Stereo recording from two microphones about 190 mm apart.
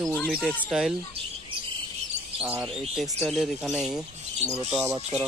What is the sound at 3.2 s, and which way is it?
Speech, centre (ahead or behind).